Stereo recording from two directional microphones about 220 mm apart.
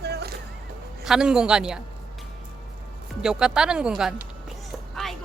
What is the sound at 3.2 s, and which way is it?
Speech, 5° right (ahead or behind).